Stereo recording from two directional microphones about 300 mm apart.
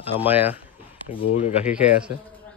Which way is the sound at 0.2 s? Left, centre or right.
Centre.